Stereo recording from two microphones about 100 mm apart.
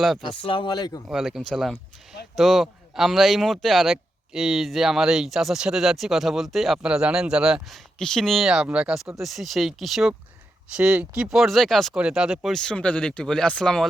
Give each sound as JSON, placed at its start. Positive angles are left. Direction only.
{"t": 0.2, "sound": "speech", "side_deg": 60}
{"t": 1.0, "sound": "speech", "side_deg": -5}
{"t": 7.9, "sound": "speech", "side_deg": 5}
{"t": 9.2, "sound": "speech", "side_deg": 0}
{"t": 11.9, "sound": "speech", "side_deg": -10}